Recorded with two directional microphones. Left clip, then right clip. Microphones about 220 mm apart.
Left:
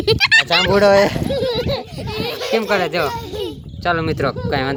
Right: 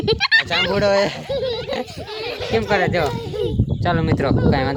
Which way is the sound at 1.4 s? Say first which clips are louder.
Left 5 dB; 30° left (ahead or behind).